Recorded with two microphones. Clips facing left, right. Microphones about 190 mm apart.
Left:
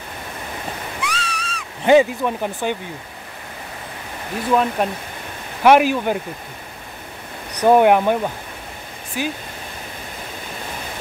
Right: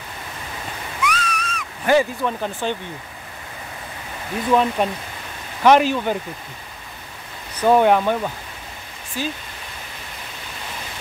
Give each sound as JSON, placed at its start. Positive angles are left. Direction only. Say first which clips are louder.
{"t": 1.0, "sound": "owl", "louder": "right 6 dB", "side_deg": 30}
{"t": 1.9, "sound": "speech", "louder": "left 4 dB", "side_deg": 15}
{"t": 4.5, "sound": "speech", "louder": "even", "side_deg": 5}
{"t": 7.6, "sound": "speech", "louder": "left 2 dB", "side_deg": 10}